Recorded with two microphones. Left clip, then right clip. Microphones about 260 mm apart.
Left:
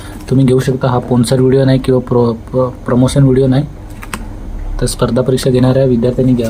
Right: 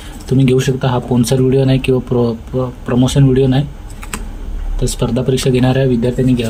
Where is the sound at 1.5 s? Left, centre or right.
Centre.